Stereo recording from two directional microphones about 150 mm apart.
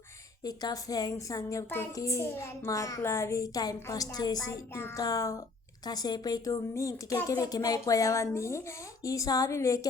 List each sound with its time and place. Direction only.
0.4 s a child's voice: 25° left (ahead or behind)